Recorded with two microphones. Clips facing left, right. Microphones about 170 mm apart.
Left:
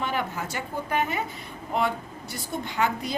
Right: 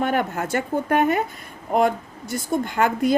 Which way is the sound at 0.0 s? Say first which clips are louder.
Right 7 dB; 50° right (ahead or behind).